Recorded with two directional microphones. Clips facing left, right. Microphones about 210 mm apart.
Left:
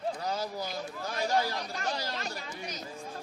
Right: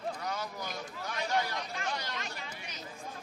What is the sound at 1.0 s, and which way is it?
Speech, 35° left (ahead or behind).